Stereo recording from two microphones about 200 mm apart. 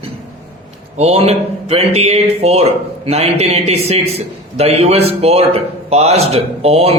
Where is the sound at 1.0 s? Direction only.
30° right (ahead or behind).